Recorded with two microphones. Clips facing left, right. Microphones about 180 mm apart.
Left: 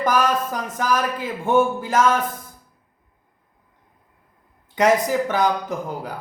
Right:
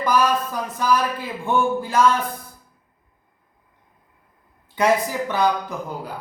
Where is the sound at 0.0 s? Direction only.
45° left (ahead or behind).